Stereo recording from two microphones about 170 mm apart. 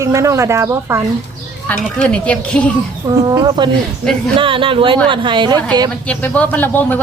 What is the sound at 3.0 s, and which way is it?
Speech, 25° right (ahead or behind).